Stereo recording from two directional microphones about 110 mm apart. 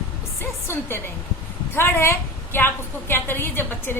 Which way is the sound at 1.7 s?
20° left (ahead or behind).